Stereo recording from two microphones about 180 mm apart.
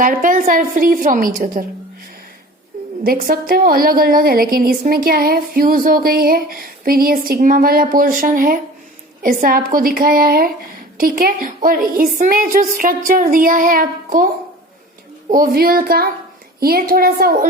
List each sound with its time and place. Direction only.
0.0 s a woman's voice: 45° right (ahead or behind)
3.0 s a woman's voice: 55° right (ahead or behind)
15.3 s a woman's voice: 55° right (ahead or behind)